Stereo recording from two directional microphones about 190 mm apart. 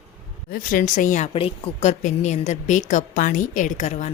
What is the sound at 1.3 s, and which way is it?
A woman's voice, 30° left (ahead or behind).